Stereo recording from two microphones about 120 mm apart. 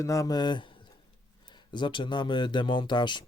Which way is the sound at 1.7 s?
40° left (ahead or behind).